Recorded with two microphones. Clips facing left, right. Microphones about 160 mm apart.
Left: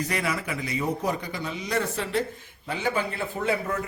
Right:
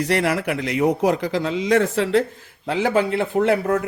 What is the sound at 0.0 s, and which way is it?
A man's voice, 75° right (ahead or behind).